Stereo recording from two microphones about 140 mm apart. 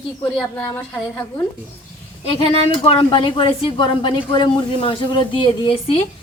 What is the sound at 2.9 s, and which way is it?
A woman's voice, 40° left (ahead or behind).